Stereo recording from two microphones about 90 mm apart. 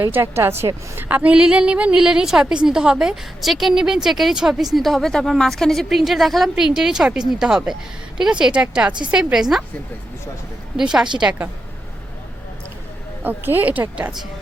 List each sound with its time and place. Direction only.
0.0 s a woman's voice: 25° right (ahead or behind); by 9.6 s 5° right (ahead or behind)
10.8 s speech: 5° right (ahead or behind)
13.2 s a woman's voice: 20° right (ahead or behind)